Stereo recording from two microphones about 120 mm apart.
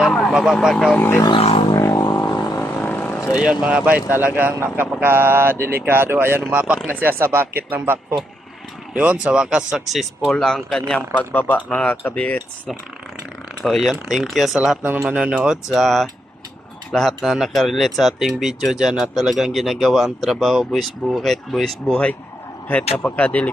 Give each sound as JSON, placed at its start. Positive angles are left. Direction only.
{"t": 0.0, "sound": "speech", "side_deg": 0}
{"t": 0.9, "sound": "speech", "side_deg": 20}
{"t": 1.4, "sound": "didgeridoo", "side_deg": 60}
{"t": 1.7, "sound": "didgeridoo", "side_deg": 25}
{"t": 2.6, "sound": "vehicle", "side_deg": 15}
{"t": 3.3, "sound": "speech", "side_deg": -10}
{"t": 13.7, "sound": "speech", "side_deg": 0}